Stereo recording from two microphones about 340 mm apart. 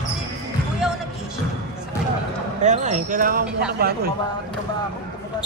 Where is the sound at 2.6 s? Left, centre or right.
Right.